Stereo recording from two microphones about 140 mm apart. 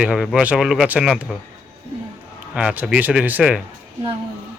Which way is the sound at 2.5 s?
5° right (ahead or behind).